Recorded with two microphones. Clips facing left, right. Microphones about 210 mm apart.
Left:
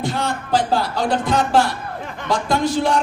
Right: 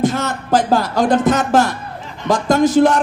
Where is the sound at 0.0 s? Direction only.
45° right (ahead or behind).